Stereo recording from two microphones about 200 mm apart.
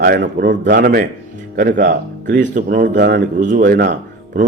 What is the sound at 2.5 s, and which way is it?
A man's voice, 45° right (ahead or behind).